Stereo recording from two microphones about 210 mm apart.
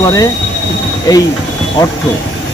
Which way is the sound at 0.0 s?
15° left (ahead or behind).